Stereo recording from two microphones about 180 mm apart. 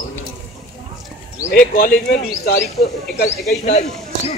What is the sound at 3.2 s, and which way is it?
Speech, 35° left (ahead or behind).